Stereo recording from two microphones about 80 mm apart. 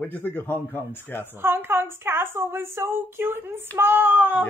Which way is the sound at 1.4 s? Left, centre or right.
Right.